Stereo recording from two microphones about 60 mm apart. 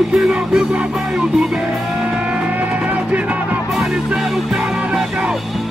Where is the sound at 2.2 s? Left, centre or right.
Centre.